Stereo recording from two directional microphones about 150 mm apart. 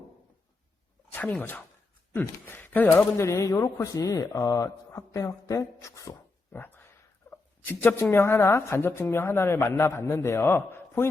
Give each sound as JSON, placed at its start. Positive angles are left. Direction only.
{"t": 1.1, "sound": "a woman's voice", "side_deg": 10}